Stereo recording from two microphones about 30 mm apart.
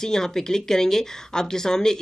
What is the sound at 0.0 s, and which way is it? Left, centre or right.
A woman's voice, centre.